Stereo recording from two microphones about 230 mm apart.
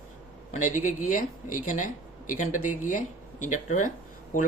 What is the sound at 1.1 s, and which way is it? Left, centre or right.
Speech, left.